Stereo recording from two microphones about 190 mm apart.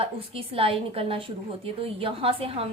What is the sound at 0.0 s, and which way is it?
A woman's voice, 30° right (ahead or behind).